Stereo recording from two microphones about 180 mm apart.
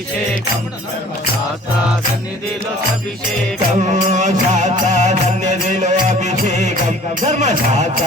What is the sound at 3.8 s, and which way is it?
Music, 40° right (ahead or behind).